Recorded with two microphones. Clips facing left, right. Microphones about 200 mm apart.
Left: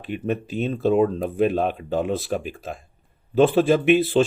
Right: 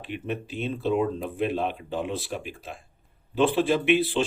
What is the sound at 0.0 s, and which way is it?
Speech, 45° left (ahead or behind).